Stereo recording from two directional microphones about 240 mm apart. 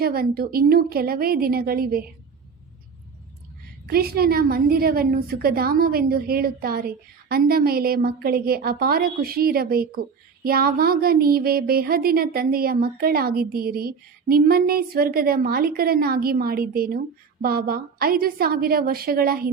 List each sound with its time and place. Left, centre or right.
0.0 s a woman's voice: right
3.8 s a woman's voice: right